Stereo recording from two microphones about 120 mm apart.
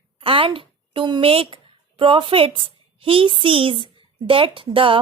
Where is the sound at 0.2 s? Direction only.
50° right (ahead or behind).